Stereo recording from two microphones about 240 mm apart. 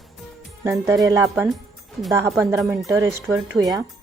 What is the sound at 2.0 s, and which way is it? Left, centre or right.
Speech, centre.